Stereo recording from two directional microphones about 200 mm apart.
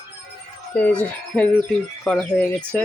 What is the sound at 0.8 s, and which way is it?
Speech, 5° left (ahead or behind).